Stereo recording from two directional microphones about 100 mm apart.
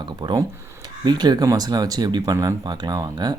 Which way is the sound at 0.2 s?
45° right (ahead or behind).